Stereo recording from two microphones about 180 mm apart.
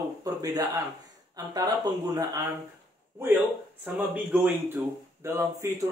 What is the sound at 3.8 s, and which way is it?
Speech, 10° right (ahead or behind).